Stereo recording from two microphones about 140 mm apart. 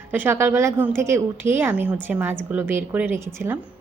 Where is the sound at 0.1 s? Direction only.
15° right (ahead or behind).